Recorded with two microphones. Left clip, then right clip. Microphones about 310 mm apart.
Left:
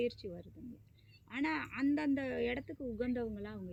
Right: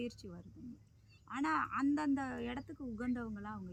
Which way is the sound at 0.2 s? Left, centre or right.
Right.